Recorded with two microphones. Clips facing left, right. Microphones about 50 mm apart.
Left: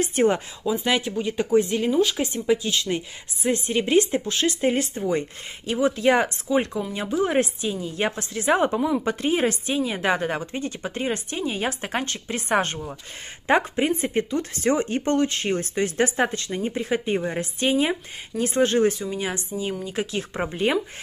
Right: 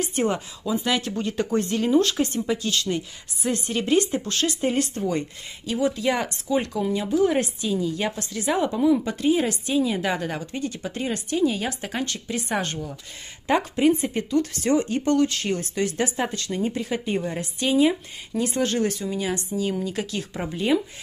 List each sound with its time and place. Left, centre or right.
0.0 s a woman's voice: left
0.8 s speech: left
1.1 s a woman's voice: centre; by 16.4 s left
16.4 s a woman's voice: left